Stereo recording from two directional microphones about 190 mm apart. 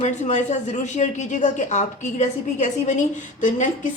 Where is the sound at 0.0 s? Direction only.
40° left (ahead or behind).